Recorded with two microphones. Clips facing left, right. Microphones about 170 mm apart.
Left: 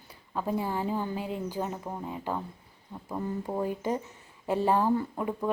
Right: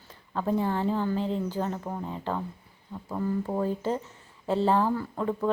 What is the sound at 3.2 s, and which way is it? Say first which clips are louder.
Speech: right 3 dB; 20° left (ahead or behind).